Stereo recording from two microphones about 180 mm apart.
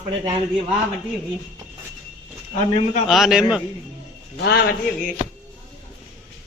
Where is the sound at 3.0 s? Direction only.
Centre (ahead or behind).